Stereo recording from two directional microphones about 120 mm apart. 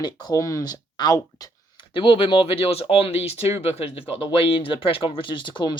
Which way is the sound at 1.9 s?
45° left (ahead or behind).